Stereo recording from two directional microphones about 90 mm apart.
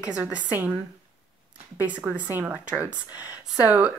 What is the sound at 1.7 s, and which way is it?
Speech, 15° right (ahead or behind).